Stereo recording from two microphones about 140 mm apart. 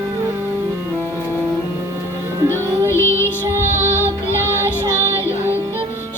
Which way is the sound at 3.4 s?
15° right (ahead or behind).